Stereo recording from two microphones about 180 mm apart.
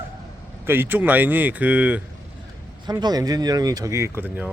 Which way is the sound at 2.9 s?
25° right (ahead or behind).